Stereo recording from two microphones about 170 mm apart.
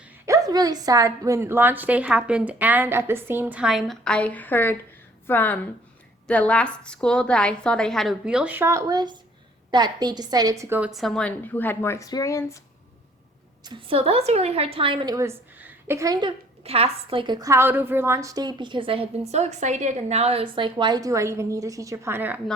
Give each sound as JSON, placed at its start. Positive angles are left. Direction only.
{"t": 0.3, "sound": "a woman's voice", "side_deg": -20}
{"t": 13.7, "sound": "a woman's voice", "side_deg": -35}
{"t": 16.6, "sound": "a woman's voice", "side_deg": -35}